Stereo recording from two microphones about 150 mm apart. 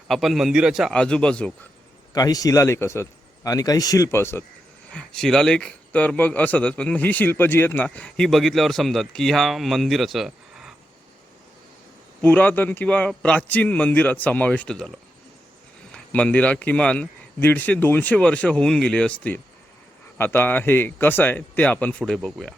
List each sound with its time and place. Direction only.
0.1 s a man's voice: centre (ahead or behind)
2.1 s a man's voice: 25° left (ahead or behind)
4.9 s a man's voice: 5° left (ahead or behind)
12.2 s a man's voice: 10° left (ahead or behind)